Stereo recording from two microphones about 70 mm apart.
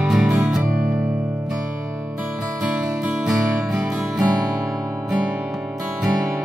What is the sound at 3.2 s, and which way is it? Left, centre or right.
Music, centre.